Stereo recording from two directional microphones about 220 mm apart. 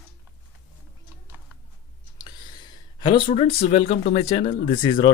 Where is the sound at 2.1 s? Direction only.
20° left (ahead or behind).